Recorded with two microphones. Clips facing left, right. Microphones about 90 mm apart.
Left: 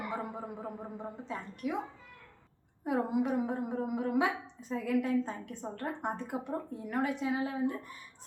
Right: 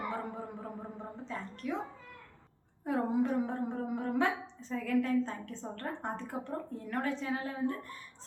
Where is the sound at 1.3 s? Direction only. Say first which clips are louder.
Even; 15° left (ahead or behind).